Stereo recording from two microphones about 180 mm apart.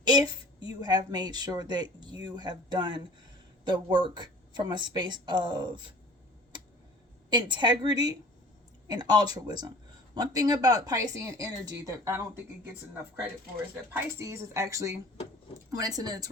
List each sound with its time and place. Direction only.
0.0 s a woman's voice: 25° right (ahead or behind)
7.3 s a woman's voice: 25° right (ahead or behind)
13.9 s a woman's voice: 15° right (ahead or behind)